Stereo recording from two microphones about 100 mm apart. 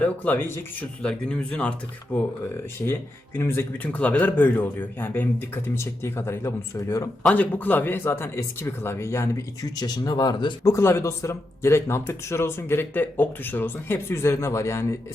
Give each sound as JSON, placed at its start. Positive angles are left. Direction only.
{"t": 0.0, "sound": "speech", "side_deg": 20}
{"t": 1.0, "sound": "speech", "side_deg": 10}
{"t": 2.8, "sound": "speech", "side_deg": 25}
{"t": 3.8, "sound": "speech", "side_deg": 10}
{"t": 7.2, "sound": "speech", "side_deg": 15}
{"t": 9.7, "sound": "speech", "side_deg": 40}
{"t": 10.7, "sound": "speech", "side_deg": 30}